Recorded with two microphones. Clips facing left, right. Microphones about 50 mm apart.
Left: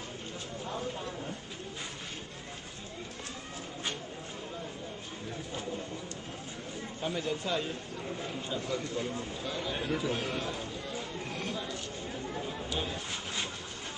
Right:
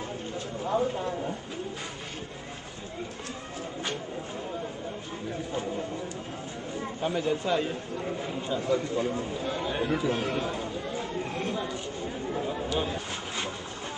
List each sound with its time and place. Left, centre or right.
0.7 s speech: right
7.0 s a man's voice: centre
9.4 s speech: right
9.8 s a man's voice: centre
12.7 s speech: centre